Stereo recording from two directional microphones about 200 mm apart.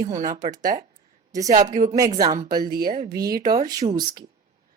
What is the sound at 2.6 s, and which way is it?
Speech, 45° right (ahead or behind).